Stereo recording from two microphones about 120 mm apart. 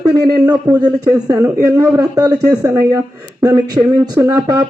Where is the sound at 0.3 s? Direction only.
35° right (ahead or behind).